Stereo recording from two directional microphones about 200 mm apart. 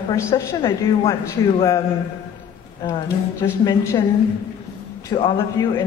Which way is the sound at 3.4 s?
15° left (ahead or behind).